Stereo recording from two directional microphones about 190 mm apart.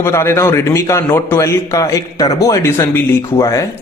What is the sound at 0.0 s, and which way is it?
Speech, 15° left (ahead or behind).